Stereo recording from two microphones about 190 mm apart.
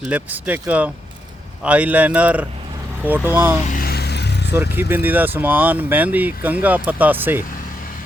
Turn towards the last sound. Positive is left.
turn(degrees=-10)  # may be behind; listen again after turning